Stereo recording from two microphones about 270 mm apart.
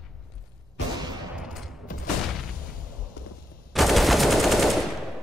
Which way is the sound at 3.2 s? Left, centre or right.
Left.